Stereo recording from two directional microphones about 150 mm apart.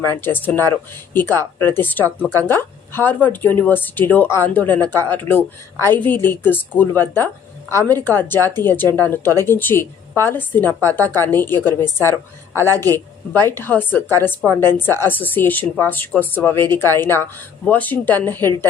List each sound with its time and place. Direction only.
0.0 s speech: 15° left (ahead or behind)